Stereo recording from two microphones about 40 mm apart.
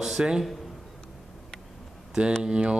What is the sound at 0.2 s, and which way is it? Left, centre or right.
Mantra, right.